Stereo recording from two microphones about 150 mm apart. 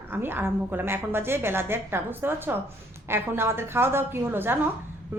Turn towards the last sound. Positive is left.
turn(degrees=-15)  # may be behind; listen again after turning